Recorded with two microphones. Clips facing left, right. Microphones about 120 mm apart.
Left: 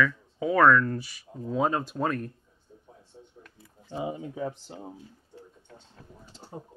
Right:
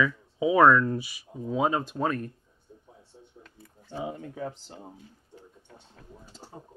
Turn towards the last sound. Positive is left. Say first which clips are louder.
# left 3 dB
turn(degrees=10)  # may be behind; listen again after turning